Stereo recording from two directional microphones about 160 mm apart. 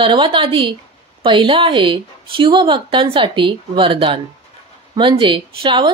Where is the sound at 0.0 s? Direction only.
30° right (ahead or behind).